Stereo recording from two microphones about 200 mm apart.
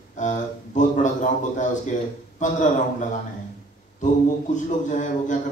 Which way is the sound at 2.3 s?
35° left (ahead or behind).